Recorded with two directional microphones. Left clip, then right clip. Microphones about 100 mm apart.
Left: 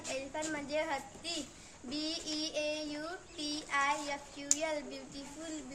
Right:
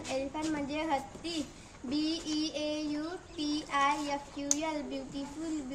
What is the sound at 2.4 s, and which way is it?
Child singing, 35° left (ahead or behind).